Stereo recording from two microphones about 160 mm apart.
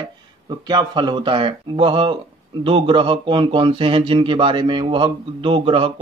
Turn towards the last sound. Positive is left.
turn(degrees=-35)  # may be behind; listen again after turning